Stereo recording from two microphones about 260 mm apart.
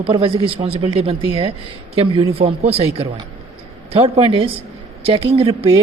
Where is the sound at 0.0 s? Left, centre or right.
Right.